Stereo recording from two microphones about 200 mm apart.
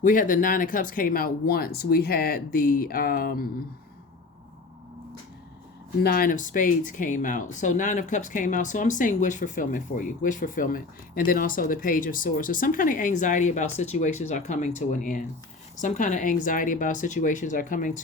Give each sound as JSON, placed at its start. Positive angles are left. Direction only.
{"t": 0.0, "sound": "speech", "side_deg": 40}
{"t": 6.0, "sound": "speech", "side_deg": 50}